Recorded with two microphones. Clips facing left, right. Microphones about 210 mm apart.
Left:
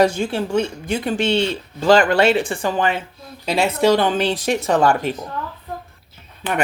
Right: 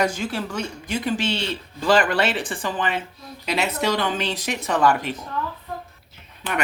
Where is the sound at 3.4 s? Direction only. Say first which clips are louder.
Left 7 dB; 30° left (ahead or behind).